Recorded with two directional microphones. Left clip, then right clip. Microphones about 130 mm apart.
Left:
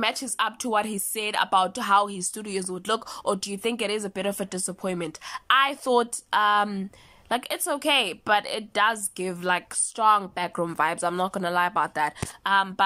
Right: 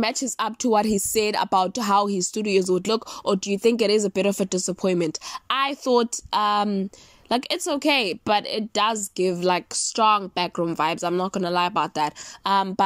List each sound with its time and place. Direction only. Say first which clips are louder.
0.0 s speech: right 1 dB; 30° right (ahead or behind)
3.6 s a woman's voice: right 8 dB; 30° right (ahead or behind); by 11.4 s 15° right (ahead or behind)
11.4 s a woman's voice: right 1 dB; 25° right (ahead or behind)
12.4 s speech: right 1 dB; 35° right (ahead or behind)